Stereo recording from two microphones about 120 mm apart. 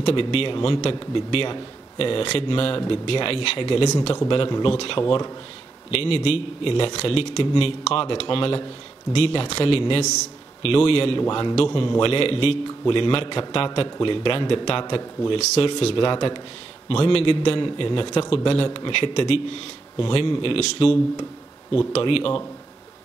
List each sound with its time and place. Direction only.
0.0 s speech: 50° left (ahead or behind)
5.9 s speech: 55° left (ahead or behind)
11.5 s speech: 50° left (ahead or behind)
15.3 s speech: 60° left (ahead or behind)